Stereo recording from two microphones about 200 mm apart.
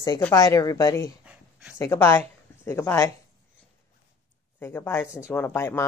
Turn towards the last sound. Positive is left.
turn(degrees=10)  # may be behind; listen again after turning